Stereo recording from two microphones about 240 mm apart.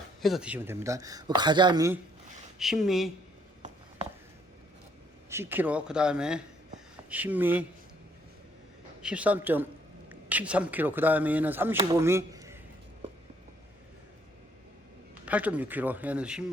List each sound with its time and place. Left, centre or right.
0.2 s speech: centre
2.6 s speech: centre
3.6 s a sound: right
5.3 s speech: centre
9.0 s a man's voice: centre
15.3 s speech: centre